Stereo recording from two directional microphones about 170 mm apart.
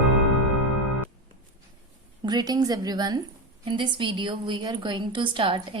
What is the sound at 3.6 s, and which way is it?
A woman's voice, 30° right (ahead or behind).